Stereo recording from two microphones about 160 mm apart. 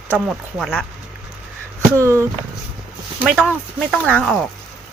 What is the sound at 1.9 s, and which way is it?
Speech, 15° right (ahead or behind).